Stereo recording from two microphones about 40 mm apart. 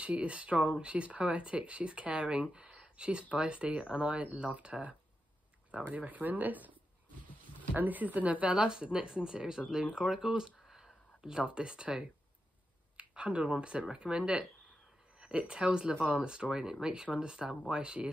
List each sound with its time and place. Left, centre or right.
0.0 s speech: right
5.9 s speech: right; by 10.5 s centre
10.7 s whispering: centre
11.3 s speech: right